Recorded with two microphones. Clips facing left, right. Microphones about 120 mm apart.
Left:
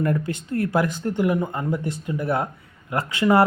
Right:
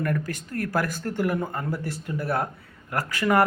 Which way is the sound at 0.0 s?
25° left (ahead or behind).